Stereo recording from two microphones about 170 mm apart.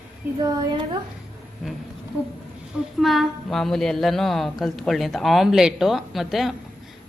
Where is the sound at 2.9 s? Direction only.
Centre (ahead or behind).